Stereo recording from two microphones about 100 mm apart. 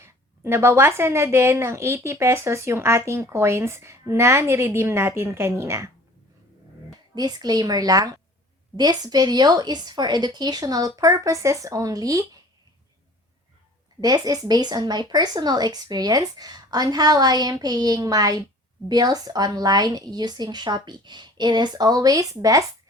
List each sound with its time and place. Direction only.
0.0 s a woman's voice: 25° right (ahead or behind)
7.2 s speech: 40° right (ahead or behind)
14.0 s speech: 40° right (ahead or behind)